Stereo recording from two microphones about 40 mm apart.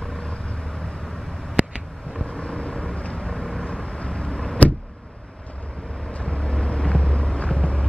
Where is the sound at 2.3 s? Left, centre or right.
Left.